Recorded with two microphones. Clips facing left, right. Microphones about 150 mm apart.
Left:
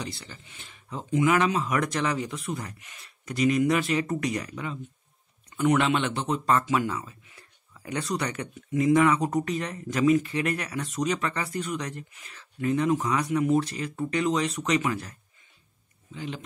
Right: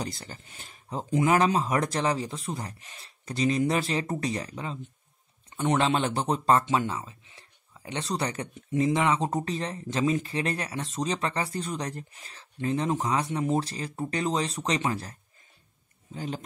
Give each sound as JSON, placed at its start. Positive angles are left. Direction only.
{"t": 0.0, "sound": "speech", "side_deg": -40}